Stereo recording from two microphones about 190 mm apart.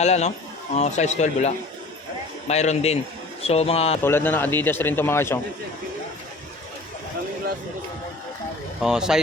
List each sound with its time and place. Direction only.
0.0 s speech: 35° left (ahead or behind)
4.0 s a man's voice: 10° left (ahead or behind)
8.8 s speech: 5° right (ahead or behind)